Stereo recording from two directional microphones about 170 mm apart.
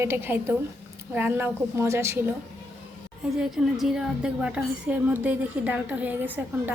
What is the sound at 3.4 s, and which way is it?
A woman's voice, 5° right (ahead or behind).